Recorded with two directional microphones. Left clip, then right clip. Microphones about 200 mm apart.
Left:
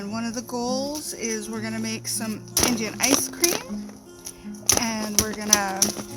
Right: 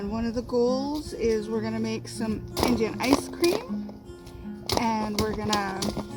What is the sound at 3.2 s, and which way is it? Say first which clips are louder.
Speech: left 1 dB; 40° left (ahead or behind).